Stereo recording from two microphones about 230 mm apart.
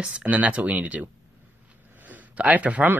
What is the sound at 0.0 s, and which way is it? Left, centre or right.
Speech, centre.